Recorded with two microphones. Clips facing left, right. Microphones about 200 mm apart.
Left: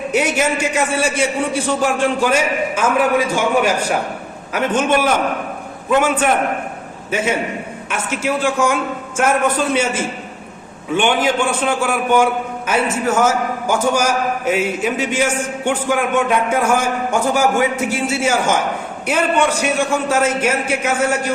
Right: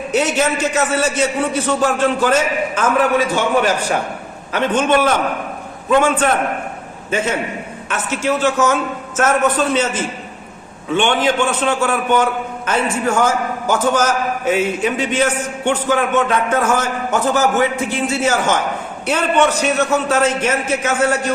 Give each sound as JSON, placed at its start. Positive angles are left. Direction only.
{"t": 0.1, "sound": "a man's voice", "side_deg": 10}